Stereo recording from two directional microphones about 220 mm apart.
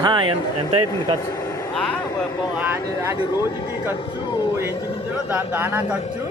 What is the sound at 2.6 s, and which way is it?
Speech, 10° right (ahead or behind).